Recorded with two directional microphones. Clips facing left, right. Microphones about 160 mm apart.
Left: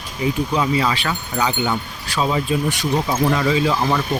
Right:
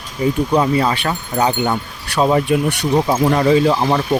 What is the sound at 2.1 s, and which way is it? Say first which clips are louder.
Speech: right 5 dB; 60° right (ahead or behind).